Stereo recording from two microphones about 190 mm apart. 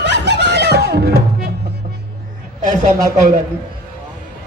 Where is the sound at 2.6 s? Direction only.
45° right (ahead or behind).